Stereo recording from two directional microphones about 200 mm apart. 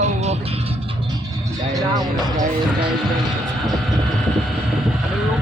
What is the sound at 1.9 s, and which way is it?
Speech, 20° right (ahead or behind).